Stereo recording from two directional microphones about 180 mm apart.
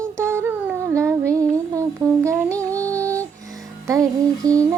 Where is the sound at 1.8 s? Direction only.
15° right (ahead or behind).